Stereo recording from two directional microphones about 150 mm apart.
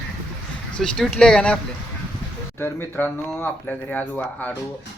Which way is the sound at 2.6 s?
15° left (ahead or behind).